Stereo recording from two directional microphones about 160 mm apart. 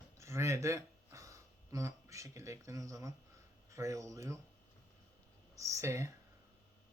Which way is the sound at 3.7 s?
20° right (ahead or behind).